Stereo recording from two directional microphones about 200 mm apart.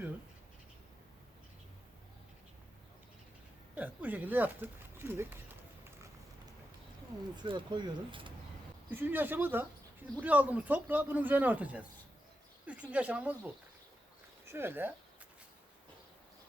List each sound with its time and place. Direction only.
3.8 s speech: 10° right (ahead or behind)
7.3 s speech: 25° right (ahead or behind)
8.9 s speech: 10° right (ahead or behind)
12.9 s speech: 5° right (ahead or behind)
14.4 s speech: 10° right (ahead or behind)